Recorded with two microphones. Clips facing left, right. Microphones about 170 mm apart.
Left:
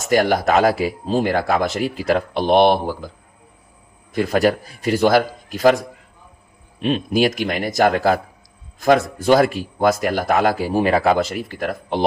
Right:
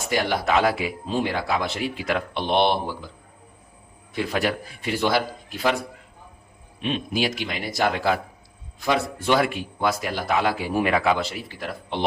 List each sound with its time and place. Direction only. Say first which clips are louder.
0.0 s a man's voice: left 7 dB; 45° left (ahead or behind)
4.1 s a man's voice: left 7 dB; 45° left (ahead or behind)
6.8 s a man's voice: left 7 dB; 45° left (ahead or behind)